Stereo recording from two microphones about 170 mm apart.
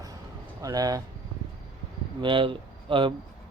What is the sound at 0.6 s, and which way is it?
Speech, 20° right (ahead or behind).